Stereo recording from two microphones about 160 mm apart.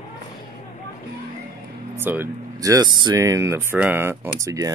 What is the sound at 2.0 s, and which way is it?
Speech, 15° right (ahead or behind).